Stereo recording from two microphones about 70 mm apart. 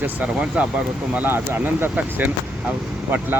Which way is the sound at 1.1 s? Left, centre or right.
Right.